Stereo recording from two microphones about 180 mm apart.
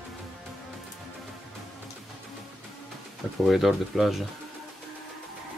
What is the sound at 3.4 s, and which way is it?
Speech, centre (ahead or behind).